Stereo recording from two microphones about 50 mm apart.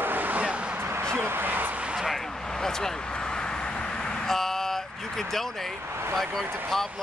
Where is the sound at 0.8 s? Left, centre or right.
Right.